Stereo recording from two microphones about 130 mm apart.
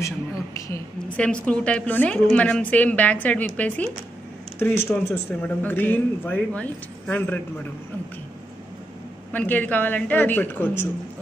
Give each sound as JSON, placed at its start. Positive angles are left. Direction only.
{"t": 0.6, "sound": "a woman's voice", "side_deg": 20}
{"t": 1.1, "sound": "speech", "side_deg": 10}
{"t": 9.3, "sound": "speech", "side_deg": 10}